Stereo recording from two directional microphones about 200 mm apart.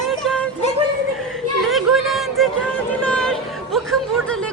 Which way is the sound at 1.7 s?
Centre (ahead or behind).